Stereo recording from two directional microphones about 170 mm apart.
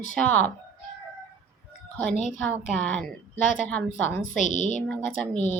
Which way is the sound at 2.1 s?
45° left (ahead or behind).